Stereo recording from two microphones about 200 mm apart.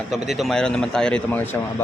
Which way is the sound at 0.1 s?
Centre (ahead or behind).